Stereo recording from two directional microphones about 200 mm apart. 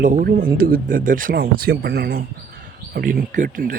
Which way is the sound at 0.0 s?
40° right (ahead or behind).